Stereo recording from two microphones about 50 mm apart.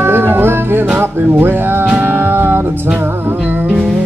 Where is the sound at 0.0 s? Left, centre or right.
Right.